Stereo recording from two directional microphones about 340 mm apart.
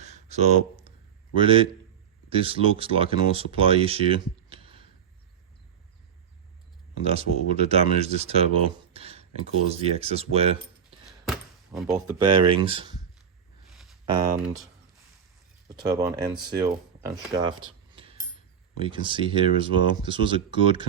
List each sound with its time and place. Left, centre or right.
0.0 s a sound: centre
1.4 s speech: centre
7.1 s speech: centre
11.0 s a sound: centre
12.2 s speech: centre
14.4 s speech: centre
15.7 s speech: centre
18.8 s speech: centre